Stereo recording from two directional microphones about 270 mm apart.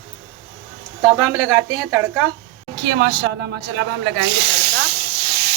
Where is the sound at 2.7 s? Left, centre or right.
Right.